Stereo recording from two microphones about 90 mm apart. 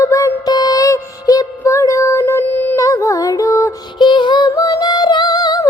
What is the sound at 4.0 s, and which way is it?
Music, 60° left (ahead or behind).